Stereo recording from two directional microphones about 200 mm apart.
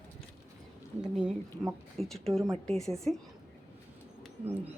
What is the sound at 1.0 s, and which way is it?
Speech, 5° right (ahead or behind).